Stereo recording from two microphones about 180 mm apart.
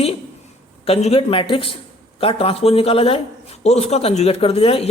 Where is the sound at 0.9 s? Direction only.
35° left (ahead or behind).